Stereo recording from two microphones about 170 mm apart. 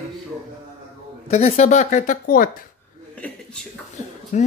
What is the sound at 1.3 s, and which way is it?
Speech, 40° left (ahead or behind).